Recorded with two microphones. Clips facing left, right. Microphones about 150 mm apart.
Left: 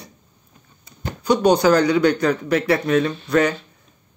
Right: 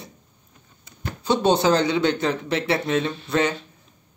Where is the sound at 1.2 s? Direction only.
25° right (ahead or behind).